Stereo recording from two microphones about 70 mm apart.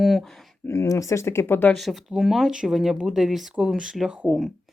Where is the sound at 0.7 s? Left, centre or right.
Left.